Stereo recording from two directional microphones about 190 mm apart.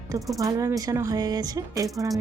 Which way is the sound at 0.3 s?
15° right (ahead or behind).